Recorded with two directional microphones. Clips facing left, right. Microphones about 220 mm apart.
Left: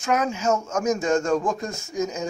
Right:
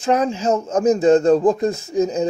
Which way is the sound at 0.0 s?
30° right (ahead or behind).